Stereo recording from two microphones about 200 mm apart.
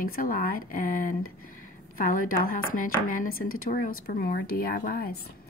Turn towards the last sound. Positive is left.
turn(degrees=50)  # may be behind; listen again after turning